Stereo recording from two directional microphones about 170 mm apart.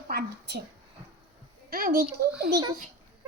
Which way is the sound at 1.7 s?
60° right (ahead or behind).